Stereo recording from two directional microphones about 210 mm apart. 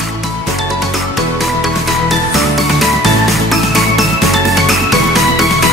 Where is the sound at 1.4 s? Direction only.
Centre (ahead or behind).